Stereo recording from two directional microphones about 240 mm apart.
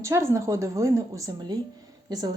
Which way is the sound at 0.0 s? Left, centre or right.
Centre.